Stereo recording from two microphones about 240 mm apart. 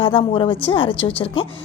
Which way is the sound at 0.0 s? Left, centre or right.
Left.